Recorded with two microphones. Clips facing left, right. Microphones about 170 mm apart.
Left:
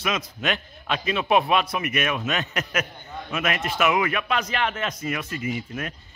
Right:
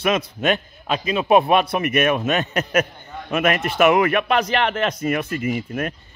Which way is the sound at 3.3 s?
55° right (ahead or behind).